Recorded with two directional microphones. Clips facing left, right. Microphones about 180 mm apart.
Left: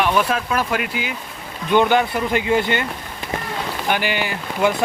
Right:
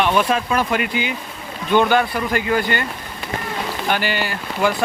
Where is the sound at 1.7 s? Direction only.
15° left (ahead or behind).